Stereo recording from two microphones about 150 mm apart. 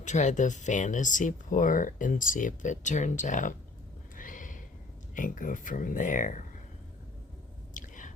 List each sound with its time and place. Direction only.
0.0 s speech: 55° left (ahead or behind)
4.2 s snort: 60° left (ahead or behind)
5.1 s speech: 60° left (ahead or behind)
7.7 s whispering: 60° left (ahead or behind)